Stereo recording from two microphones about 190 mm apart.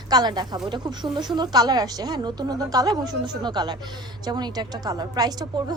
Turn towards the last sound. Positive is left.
turn(degrees=-20)  # may be behind; listen again after turning